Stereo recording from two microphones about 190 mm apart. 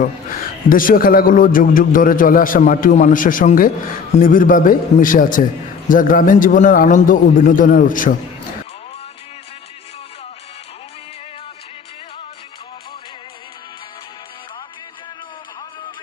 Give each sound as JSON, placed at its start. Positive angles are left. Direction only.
{"t": 0.0, "sound": "a man's voice", "side_deg": 45}